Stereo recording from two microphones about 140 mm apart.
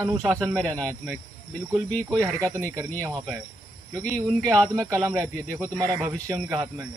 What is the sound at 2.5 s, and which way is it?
Speech, 20° right (ahead or behind).